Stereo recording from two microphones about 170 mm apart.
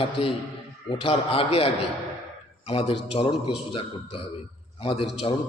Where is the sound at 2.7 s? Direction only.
35° left (ahead or behind).